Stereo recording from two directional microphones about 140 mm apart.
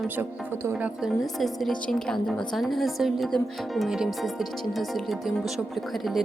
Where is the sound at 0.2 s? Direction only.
15° right (ahead or behind).